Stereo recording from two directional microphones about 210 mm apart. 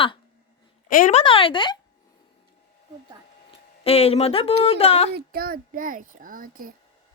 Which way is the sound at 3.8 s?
30° left (ahead or behind).